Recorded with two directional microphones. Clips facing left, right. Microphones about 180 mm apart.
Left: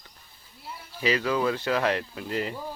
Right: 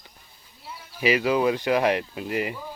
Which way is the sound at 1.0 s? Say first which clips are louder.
Right 4 dB; 15° right (ahead or behind).